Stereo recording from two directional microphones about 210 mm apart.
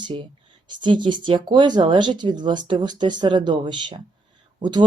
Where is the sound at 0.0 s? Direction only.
25° right (ahead or behind).